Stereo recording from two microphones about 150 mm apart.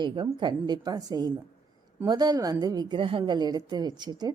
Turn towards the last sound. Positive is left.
turn(degrees=-30)  # may be behind; listen again after turning